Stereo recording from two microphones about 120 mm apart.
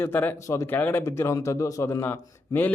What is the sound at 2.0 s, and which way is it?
Speech, 15° left (ahead or behind).